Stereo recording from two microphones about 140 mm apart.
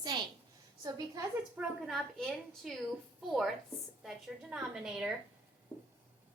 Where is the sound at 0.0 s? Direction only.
30° right (ahead or behind).